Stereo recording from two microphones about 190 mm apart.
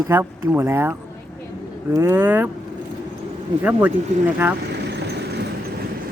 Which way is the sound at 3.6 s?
10° right (ahead or behind).